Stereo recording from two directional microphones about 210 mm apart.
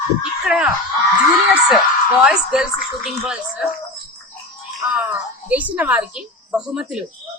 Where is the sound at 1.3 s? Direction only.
Centre (ahead or behind).